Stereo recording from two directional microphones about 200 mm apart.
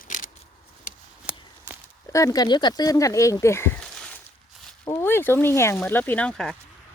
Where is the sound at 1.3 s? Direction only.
5° right (ahead or behind).